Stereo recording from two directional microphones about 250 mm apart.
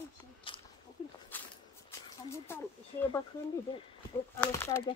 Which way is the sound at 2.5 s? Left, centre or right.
Centre.